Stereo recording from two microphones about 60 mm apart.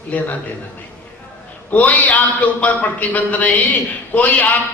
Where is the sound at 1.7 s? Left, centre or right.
Left.